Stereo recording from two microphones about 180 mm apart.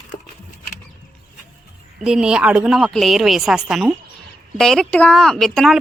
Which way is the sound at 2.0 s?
5° right (ahead or behind).